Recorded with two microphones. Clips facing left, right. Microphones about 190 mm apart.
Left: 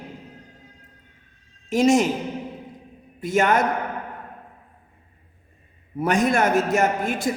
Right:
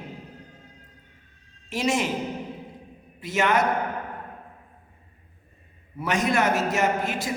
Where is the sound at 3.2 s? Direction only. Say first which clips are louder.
Left 3 dB; 45° left (ahead or behind).